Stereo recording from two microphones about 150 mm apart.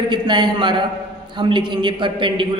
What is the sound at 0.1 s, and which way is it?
A woman's voice, 30° right (ahead or behind).